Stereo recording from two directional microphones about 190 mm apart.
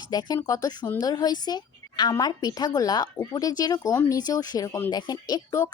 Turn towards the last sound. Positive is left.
turn(degrees=20)  # may be behind; listen again after turning